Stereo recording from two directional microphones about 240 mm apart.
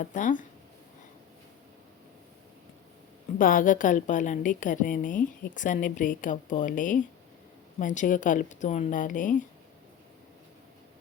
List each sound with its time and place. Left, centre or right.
0.0 s a woman's voice: left
3.3 s a woman's voice: left